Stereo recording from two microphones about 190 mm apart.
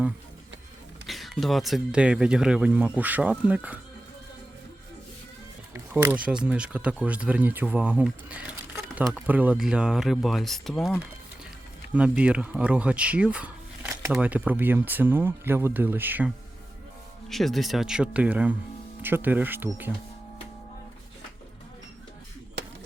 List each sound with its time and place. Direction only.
1.0 s speech: centre (ahead or behind)
5.7 s a sound: 10° right (ahead or behind)
6.4 s speech: 5° right (ahead or behind)
17.2 s speech: centre (ahead or behind)